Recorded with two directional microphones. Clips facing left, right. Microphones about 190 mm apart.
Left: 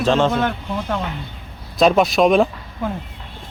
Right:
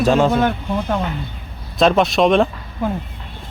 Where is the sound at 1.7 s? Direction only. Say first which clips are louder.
Even; centre (ahead or behind).